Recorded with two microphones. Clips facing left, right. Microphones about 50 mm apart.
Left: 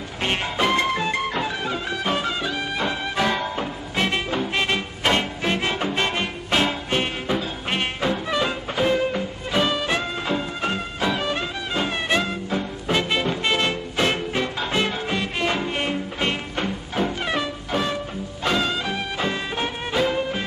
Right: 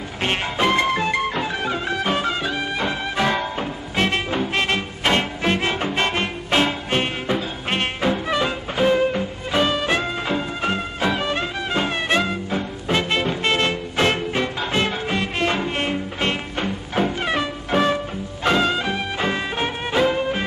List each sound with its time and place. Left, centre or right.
0.2 s music: centre
17.6 s music: right
18.4 s music: centre